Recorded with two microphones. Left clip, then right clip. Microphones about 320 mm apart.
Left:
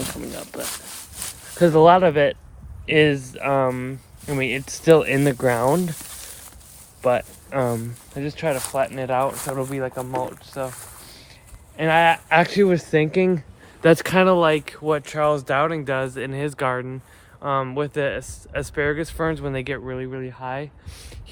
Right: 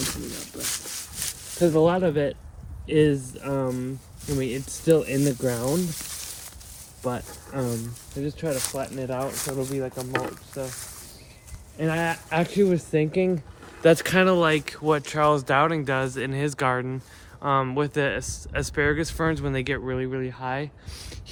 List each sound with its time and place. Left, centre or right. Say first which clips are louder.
0.5 s speech: left 1 dB; centre
7.0 s speech: left 10 dB; centre
9.3 s speech: left 3 dB; centre
9.6 s speech: left 3 dB; left
11.8 s speech: left 10 dB; centre